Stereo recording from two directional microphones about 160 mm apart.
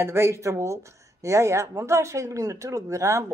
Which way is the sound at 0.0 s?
15° right (ahead or behind).